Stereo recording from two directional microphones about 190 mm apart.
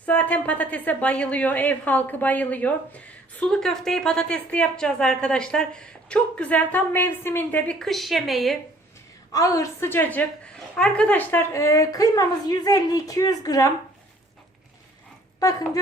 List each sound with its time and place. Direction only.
0.0 s a woman's voice: 10° left (ahead or behind)
9.3 s a woman's voice: 15° left (ahead or behind)
15.4 s speech: 20° left (ahead or behind)